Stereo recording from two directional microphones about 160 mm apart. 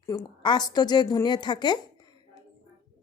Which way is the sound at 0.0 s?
25° left (ahead or behind).